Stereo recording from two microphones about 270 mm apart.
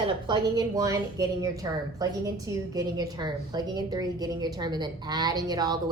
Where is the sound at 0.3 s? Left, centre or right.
Centre.